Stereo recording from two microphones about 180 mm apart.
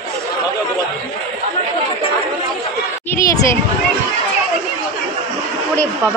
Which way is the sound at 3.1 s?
15° left (ahead or behind).